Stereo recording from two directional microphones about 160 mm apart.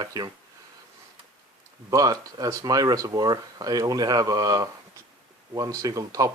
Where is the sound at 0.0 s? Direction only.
25° right (ahead or behind).